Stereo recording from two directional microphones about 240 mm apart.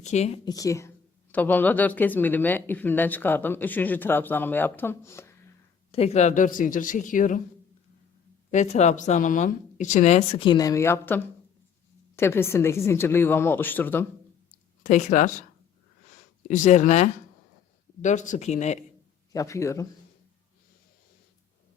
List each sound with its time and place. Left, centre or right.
0.0 s speech: left
0.4 s a woman's voice: centre
5.9 s speech: left
8.4 s a woman's voice: left; by 14.0 s centre
14.8 s speech: left
16.5 s speech: left
19.3 s a woman's voice: centre